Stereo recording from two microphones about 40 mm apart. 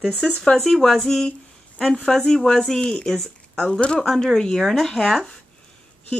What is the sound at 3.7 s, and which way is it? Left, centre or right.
Speech, left.